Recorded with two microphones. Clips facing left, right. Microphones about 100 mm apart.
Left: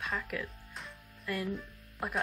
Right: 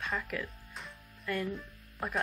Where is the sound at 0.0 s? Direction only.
Centre (ahead or behind).